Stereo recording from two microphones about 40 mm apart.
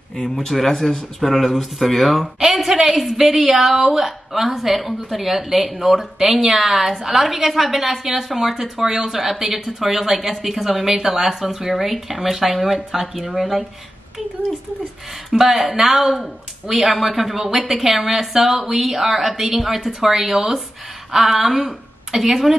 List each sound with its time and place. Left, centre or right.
0.1 s speech: centre
0.5 s speech: centre
15.2 s speech: centre